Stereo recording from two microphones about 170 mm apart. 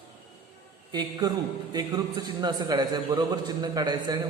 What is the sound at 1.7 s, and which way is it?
A man's voice, 25° right (ahead or behind).